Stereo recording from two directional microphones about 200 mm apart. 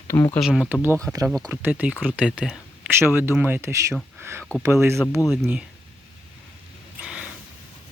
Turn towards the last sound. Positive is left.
turn(degrees=-5)  # may be behind; listen again after turning